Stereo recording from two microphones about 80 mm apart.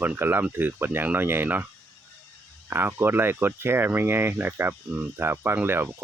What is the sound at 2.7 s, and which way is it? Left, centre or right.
Speech, right.